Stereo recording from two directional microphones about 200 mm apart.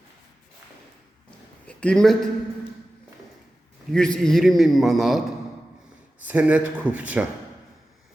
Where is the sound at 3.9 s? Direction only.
5° left (ahead or behind).